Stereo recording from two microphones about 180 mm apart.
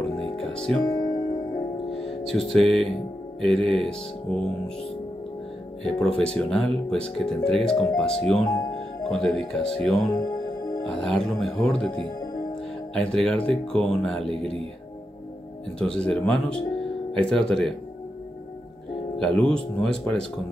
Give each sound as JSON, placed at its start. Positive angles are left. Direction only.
{"t": 0.2, "sound": "music", "side_deg": 5}
{"t": 0.8, "sound": "music", "side_deg": 20}
{"t": 2.3, "sound": "speech", "side_deg": 0}
{"t": 5.9, "sound": "speech", "side_deg": 5}
{"t": 10.1, "sound": "music", "side_deg": 20}
{"t": 10.8, "sound": "speech", "side_deg": 5}
{"t": 12.2, "sound": "music", "side_deg": 20}
{"t": 12.9, "sound": "speech", "side_deg": 5}
{"t": 15.9, "sound": "speech", "side_deg": 5}
{"t": 19.1, "sound": "speech", "side_deg": 5}